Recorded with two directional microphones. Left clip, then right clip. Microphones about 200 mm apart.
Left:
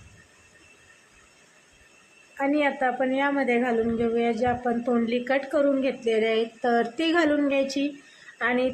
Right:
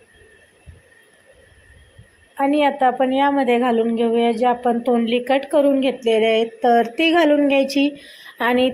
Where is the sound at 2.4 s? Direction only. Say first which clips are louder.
Right 7 dB; 20° right (ahead or behind).